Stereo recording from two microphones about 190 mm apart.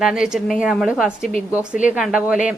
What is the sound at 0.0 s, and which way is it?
A woman's voice, 5° right (ahead or behind).